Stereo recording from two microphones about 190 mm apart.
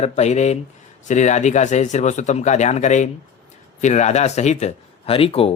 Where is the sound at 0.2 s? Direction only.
35° left (ahead or behind).